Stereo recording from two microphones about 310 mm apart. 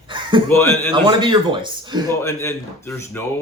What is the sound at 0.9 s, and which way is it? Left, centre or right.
A man's voice, centre.